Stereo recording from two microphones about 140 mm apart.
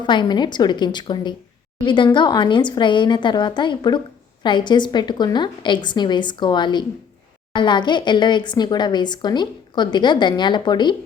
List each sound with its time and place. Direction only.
0.0 s speech: 35° left (ahead or behind)